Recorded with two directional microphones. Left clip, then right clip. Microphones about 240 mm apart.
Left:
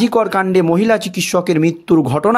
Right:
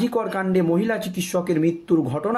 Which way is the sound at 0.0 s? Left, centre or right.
Left.